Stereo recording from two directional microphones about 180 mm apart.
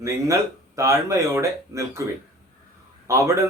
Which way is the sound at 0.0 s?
15° right (ahead or behind).